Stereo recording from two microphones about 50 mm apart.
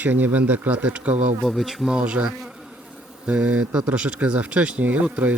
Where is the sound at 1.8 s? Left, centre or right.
Right.